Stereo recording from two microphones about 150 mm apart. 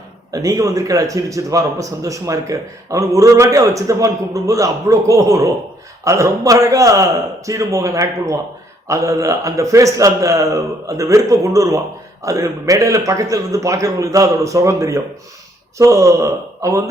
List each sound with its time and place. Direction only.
0.3 s a man's voice: 25° right (ahead or behind)